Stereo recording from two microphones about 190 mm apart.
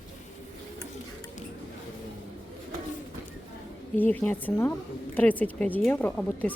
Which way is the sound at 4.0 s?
10° left (ahead or behind).